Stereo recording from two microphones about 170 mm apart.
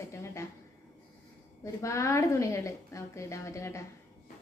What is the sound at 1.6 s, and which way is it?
A woman's voice, 20° left (ahead or behind).